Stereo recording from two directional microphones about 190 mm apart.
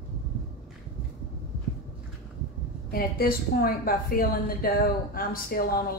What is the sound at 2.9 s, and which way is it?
A woman's voice, 50° left (ahead or behind).